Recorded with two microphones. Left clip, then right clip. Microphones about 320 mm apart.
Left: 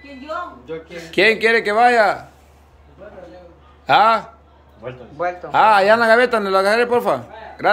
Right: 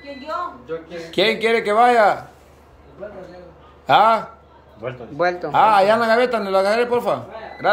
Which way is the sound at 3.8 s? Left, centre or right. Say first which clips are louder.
Left 1 dB; centre.